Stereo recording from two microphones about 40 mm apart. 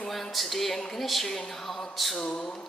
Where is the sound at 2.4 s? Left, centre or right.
Centre.